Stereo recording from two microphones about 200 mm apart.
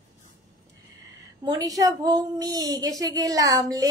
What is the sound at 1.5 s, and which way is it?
A woman's voice, 20° right (ahead or behind).